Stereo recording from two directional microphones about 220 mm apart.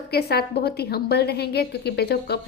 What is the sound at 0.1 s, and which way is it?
A woman's voice, 45° left (ahead or behind).